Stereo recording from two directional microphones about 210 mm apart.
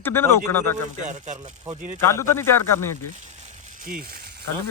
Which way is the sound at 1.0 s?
35° right (ahead or behind).